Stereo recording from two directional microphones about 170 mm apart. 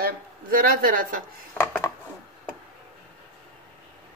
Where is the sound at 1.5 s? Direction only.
15° left (ahead or behind).